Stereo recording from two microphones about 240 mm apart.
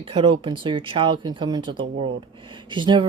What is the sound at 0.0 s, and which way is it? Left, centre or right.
Speech, right.